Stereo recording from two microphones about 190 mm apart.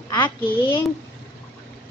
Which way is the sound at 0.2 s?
10° left (ahead or behind).